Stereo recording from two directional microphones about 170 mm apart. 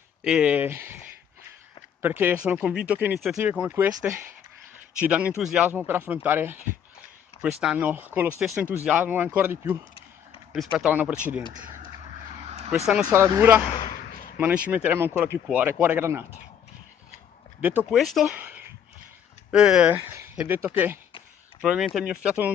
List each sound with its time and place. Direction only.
0.2 s speech: 5° right (ahead or behind)
10.5 s speech: centre (ahead or behind)
12.4 s vehicle: 40° right (ahead or behind)
13.0 s speech: 20° right (ahead or behind)
13.7 s a sound: 45° left (ahead or behind)
14.7 s speech: 10° right (ahead or behind)
17.6 s speech: 10° right (ahead or behind)
18.3 s a sound: 10° right (ahead or behind)
19.5 s speech: 5° right (ahead or behind)